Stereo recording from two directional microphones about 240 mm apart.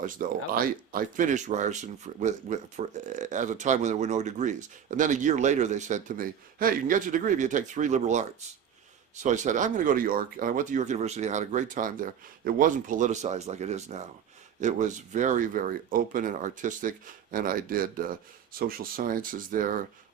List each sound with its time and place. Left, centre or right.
0.0 s speech: right